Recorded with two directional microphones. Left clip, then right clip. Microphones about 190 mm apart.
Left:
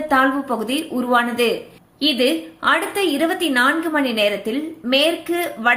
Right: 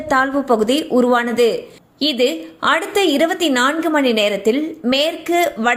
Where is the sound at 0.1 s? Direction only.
40° right (ahead or behind).